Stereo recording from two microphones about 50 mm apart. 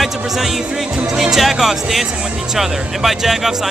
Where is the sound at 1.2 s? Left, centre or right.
Centre.